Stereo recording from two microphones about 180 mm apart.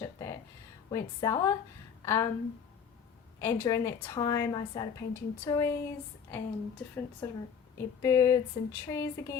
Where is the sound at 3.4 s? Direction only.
15° left (ahead or behind).